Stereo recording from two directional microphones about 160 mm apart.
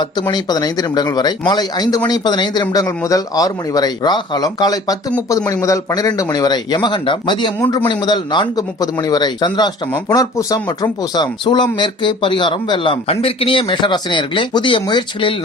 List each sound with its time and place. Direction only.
0.0 s speech: 30° left (ahead or behind)